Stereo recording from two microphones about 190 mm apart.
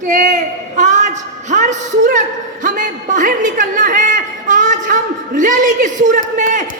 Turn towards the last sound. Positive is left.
turn(degrees=-45)  # may be behind; listen again after turning